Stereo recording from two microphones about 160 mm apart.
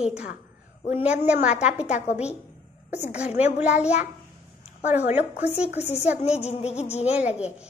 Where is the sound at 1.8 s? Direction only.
45° left (ahead or behind).